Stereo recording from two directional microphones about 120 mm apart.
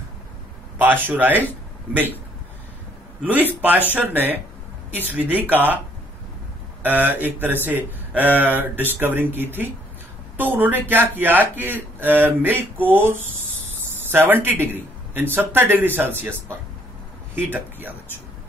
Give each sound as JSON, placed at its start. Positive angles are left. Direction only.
{"t": 0.7, "sound": "speech", "side_deg": -15}
{"t": 3.3, "sound": "speech", "side_deg": -15}
{"t": 6.8, "sound": "a woman's voice", "side_deg": -15}